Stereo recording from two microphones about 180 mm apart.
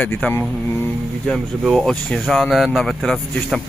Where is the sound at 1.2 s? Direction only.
Centre (ahead or behind).